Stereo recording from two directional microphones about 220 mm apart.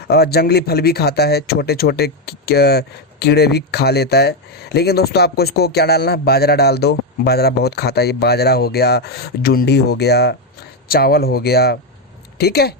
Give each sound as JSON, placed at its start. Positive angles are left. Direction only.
{"t": 0.1, "sound": "speech", "side_deg": 45}